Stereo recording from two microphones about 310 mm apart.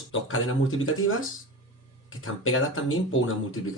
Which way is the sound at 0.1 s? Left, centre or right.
Left.